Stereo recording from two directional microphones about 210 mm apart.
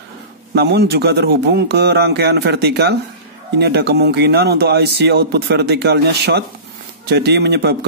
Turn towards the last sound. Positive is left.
turn(degrees=-50)  # may be behind; listen again after turning